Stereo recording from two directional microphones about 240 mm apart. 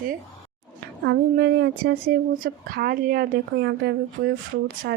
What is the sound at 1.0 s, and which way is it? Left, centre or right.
A woman's voice, right.